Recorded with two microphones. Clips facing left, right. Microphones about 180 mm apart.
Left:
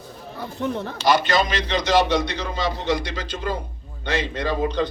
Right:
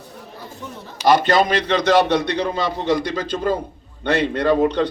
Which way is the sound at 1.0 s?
55° right (ahead or behind).